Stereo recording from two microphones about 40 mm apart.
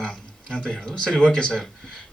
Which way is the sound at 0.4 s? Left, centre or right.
Left.